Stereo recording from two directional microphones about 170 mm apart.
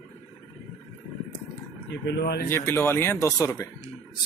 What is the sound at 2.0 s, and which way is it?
Speech, 80° left.